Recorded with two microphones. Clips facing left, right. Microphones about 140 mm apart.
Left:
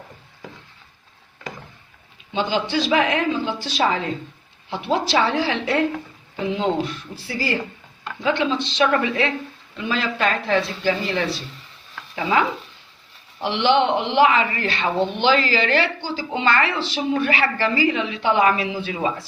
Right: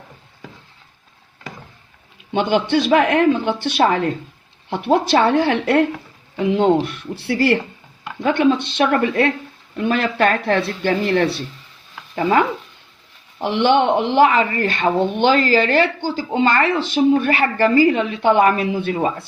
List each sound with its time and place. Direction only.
2.3 s speech: 60° right (ahead or behind)
8.2 s a woman's voice: 55° right (ahead or behind)
12.1 s a woman's voice: 45° right (ahead or behind)